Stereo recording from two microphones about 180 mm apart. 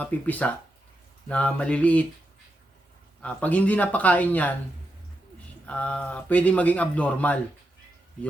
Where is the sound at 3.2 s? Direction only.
10° left (ahead or behind).